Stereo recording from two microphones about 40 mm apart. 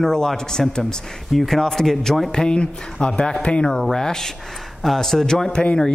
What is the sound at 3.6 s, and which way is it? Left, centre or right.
Speech, centre.